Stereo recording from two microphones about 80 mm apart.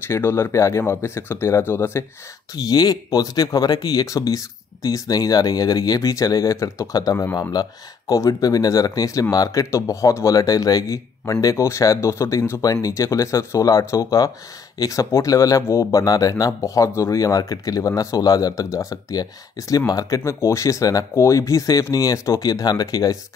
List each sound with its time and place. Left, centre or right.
0.1 s speech: left
2.5 s speech: left